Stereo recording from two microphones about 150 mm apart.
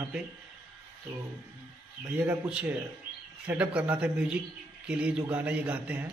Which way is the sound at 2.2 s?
10° right (ahead or behind).